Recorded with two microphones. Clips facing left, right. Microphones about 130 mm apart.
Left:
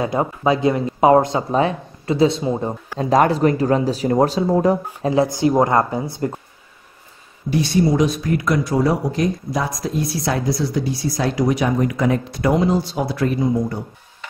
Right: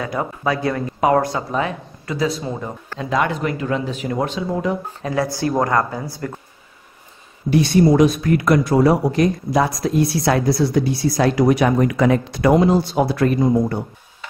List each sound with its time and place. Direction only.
0.0 s speech: 25° left (ahead or behind)
3.0 s speech: 40° left (ahead or behind)
5.1 s speech: 20° left (ahead or behind)
7.5 s speech: 60° right (ahead or behind)